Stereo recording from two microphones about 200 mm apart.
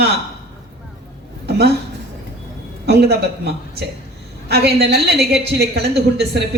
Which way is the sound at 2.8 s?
55° right (ahead or behind).